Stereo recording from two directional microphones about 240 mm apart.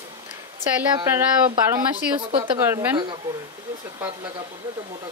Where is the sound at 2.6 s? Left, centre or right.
Centre.